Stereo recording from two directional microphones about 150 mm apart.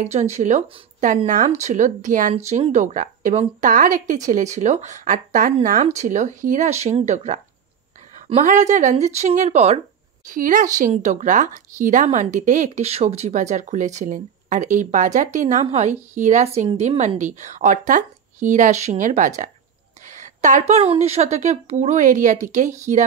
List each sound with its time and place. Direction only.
0.0 s speech: 50° right (ahead or behind)
8.4 s speech: 55° right (ahead or behind)
10.2 s speech: 65° right (ahead or behind)
10.9 s speech: 50° right (ahead or behind)